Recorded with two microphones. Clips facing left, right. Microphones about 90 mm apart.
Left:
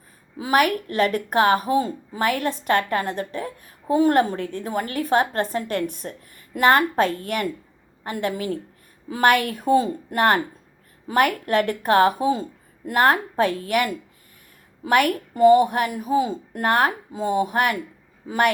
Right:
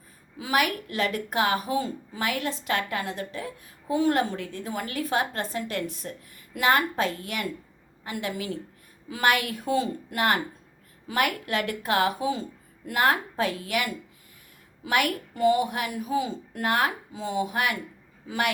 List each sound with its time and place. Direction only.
0.3 s a woman's voice: 40° left (ahead or behind)